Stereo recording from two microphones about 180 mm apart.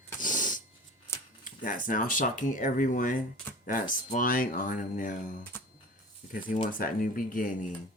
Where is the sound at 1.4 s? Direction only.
50° left (ahead or behind).